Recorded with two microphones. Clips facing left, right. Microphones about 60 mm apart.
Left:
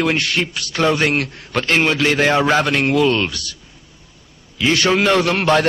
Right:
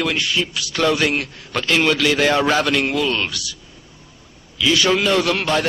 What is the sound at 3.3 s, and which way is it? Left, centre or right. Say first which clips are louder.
A man's voice: even; left.